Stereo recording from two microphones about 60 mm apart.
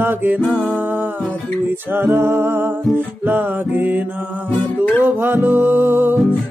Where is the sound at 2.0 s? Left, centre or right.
Right.